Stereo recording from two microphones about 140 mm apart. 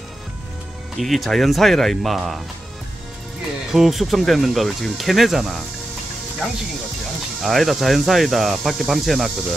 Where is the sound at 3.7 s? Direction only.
5° right (ahead or behind).